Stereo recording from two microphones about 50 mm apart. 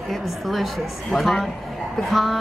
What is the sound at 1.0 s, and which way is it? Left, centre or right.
A woman's voice, centre.